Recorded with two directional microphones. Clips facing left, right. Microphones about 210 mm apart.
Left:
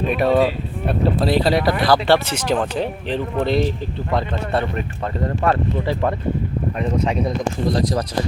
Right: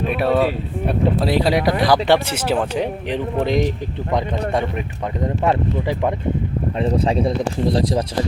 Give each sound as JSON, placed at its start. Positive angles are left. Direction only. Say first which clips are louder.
{"t": 0.2, "sound": "speech", "louder": "left 1 dB", "side_deg": -5}
{"t": 5.2, "sound": "speech", "louder": "right 1 dB", "side_deg": -15}
{"t": 6.7, "sound": "speech", "louder": "right 3 dB", "side_deg": -30}